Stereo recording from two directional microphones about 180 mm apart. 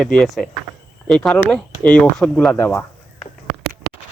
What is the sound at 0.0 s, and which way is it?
Speech, 5° left (ahead or behind).